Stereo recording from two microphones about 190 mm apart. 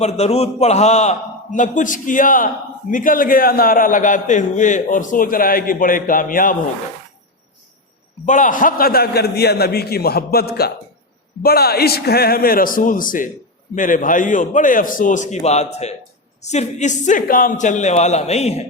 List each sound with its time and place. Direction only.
0.0 s a man's voice: 35° left (ahead or behind)
8.3 s a man's voice: 45° left (ahead or behind)